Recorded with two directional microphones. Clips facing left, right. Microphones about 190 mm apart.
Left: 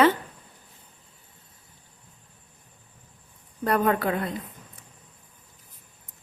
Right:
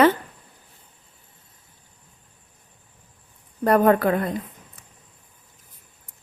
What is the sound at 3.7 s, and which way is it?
Speech, 45° right (ahead or behind).